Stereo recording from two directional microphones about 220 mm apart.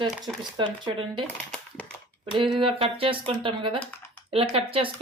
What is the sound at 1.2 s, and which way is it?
Speech, 5° left (ahead or behind).